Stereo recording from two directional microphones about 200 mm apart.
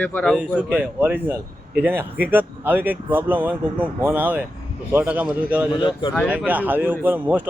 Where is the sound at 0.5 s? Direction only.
10° right (ahead or behind).